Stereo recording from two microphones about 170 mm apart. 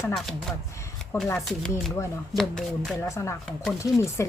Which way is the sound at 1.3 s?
Centre (ahead or behind).